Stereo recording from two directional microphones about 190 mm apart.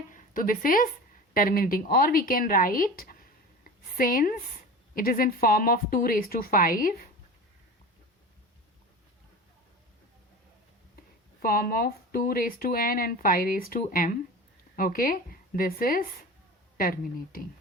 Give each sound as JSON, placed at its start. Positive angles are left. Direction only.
{"t": 0.1, "sound": "a woman's voice", "side_deg": 45}
{"t": 11.4, "sound": "speech", "side_deg": 50}